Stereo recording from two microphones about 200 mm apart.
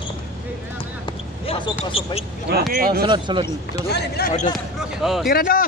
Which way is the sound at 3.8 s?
55° left (ahead or behind).